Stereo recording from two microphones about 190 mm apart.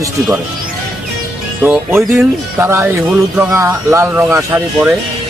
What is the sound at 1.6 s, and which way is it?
Speech, 10° right (ahead or behind).